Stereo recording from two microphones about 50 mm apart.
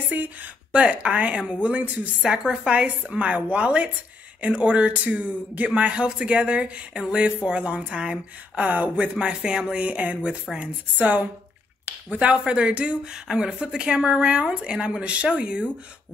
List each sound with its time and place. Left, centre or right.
0.1 s speech: right
0.7 s speech: right
8.6 s speech: right
8.9 s speech: centre
11.0 s speech: right
13.1 s speech: centre